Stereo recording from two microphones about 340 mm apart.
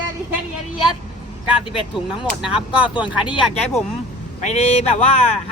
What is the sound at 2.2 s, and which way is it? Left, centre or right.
Speech, centre.